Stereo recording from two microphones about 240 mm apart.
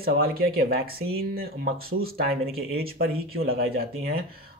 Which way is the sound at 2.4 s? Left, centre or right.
Right.